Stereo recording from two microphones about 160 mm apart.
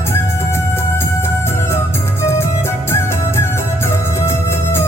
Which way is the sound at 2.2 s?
15° left (ahead or behind).